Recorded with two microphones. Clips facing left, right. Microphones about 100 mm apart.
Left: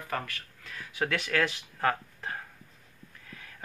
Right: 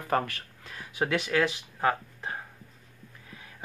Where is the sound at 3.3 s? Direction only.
15° right (ahead or behind).